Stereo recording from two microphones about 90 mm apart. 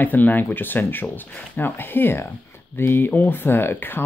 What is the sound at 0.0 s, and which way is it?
Speech, 20° left (ahead or behind).